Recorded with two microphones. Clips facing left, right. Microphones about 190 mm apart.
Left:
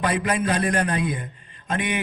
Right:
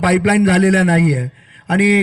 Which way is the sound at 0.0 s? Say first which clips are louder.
Right 10 dB; 90° right.